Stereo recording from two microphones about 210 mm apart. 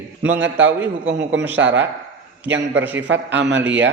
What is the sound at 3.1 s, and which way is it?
Speech, 60° right (ahead or behind).